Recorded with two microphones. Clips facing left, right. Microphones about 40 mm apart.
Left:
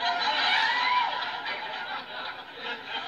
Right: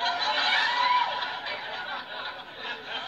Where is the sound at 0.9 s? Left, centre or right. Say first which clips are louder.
Right 1 dB; right.